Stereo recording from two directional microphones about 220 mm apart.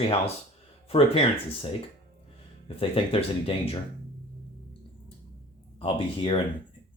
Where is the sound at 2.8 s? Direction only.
25° left (ahead or behind).